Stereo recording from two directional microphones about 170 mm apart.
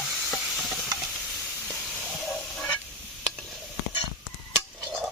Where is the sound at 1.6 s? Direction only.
Centre (ahead or behind).